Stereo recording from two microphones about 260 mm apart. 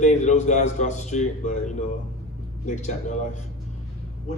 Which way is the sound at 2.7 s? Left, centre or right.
Left.